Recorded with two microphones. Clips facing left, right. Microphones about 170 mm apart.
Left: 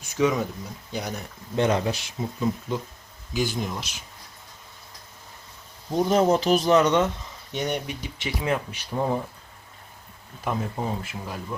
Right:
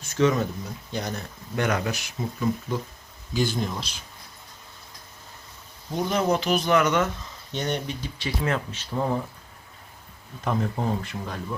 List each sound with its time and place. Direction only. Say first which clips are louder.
0.0 s speech: right 1 dB; 10° left (ahead or behind)
1.5 s speech: left 3 dB; 25° left (ahead or behind); by 3.8 s 10° left (ahead or behind)
5.9 s speech: left 4 dB; 40° left (ahead or behind)
6.7 s speech: even; 25° left (ahead or behind)
7.5 s speech: even; 15° left (ahead or behind)
10.4 s speech: right 2 dB; 5° left (ahead or behind)